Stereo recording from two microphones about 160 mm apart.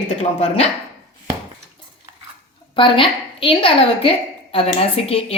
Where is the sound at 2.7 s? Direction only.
35° left (ahead or behind).